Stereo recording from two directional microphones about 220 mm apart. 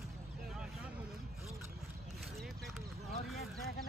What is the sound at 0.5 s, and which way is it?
Vehicle, 5° right (ahead or behind).